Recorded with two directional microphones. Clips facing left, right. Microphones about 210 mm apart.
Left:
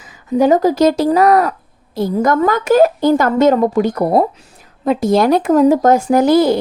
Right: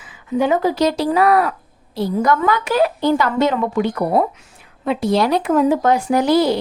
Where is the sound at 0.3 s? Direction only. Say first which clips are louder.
Left 5 dB; 40° left (ahead or behind).